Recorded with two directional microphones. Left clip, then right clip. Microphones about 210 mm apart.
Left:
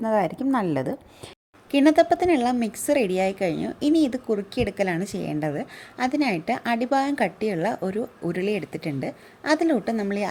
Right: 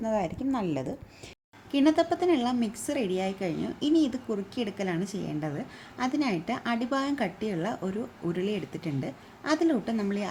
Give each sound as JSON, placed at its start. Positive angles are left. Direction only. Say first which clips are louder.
{"t": 0.0, "sound": "a woman's voice", "louder": "left 6 dB", "side_deg": 25}